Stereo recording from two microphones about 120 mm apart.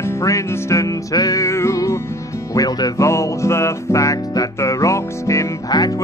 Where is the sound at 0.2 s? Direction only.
25° left (ahead or behind).